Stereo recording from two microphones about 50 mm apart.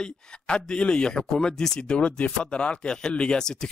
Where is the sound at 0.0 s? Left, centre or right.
Centre.